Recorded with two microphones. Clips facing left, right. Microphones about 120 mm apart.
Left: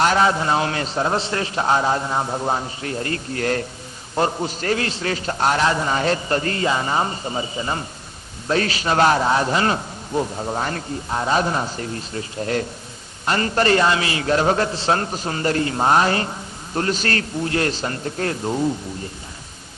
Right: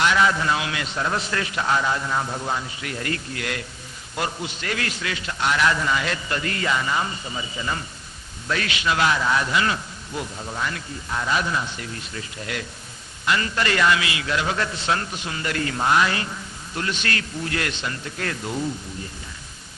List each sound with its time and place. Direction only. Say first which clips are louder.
0.0 s a man's voice: left 3 dB; 35° left (ahead or behind)